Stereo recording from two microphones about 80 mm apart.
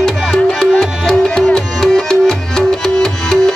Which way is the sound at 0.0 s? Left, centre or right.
Centre.